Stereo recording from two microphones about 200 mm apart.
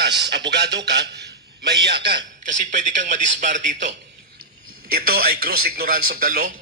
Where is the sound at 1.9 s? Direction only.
25° right (ahead or behind).